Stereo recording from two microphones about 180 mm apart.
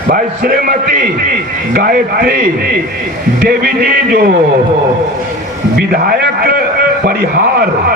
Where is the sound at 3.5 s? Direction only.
55° right (ahead or behind).